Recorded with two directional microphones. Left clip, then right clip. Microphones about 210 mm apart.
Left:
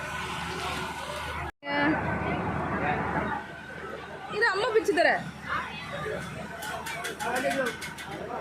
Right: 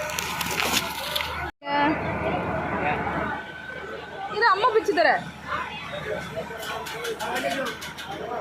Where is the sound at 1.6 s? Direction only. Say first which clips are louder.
Right 4 dB; 10° left (ahead or behind).